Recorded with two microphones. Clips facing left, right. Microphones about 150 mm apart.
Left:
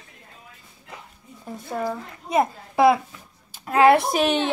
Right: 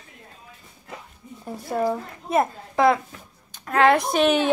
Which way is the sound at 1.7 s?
10° right (ahead or behind).